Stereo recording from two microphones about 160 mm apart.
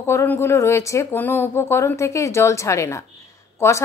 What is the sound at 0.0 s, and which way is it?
Speech, 15° left (ahead or behind).